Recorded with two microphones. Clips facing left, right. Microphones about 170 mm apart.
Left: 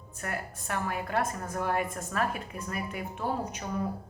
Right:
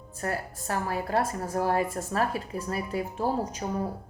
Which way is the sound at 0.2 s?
35° right (ahead or behind).